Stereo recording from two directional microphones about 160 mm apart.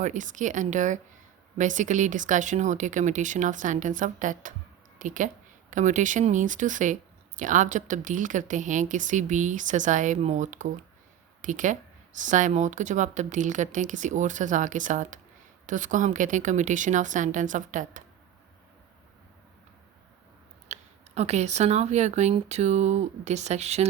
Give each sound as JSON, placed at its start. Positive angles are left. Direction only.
{"t": 0.0, "sound": "speech", "side_deg": -50}
{"t": 20.7, "sound": "a sound", "side_deg": -45}
{"t": 21.2, "sound": "speech", "side_deg": -45}